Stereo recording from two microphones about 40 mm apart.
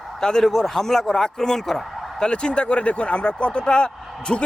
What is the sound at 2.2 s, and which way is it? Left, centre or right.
Speech, left.